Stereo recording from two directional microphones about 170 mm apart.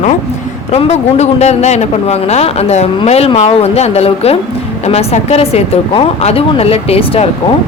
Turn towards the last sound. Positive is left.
turn(degrees=35)  # may be behind; listen again after turning